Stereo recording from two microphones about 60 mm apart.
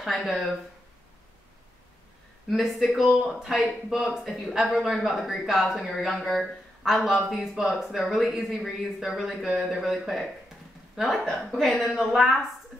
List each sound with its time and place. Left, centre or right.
0.0 s speech: centre
2.5 s speech: centre
3.0 s speech: centre
3.3 s speech: centre